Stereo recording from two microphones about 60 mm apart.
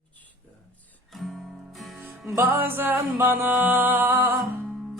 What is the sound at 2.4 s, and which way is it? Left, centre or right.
Music, right.